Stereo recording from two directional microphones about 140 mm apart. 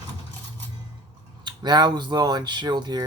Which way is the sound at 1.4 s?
30° right (ahead or behind).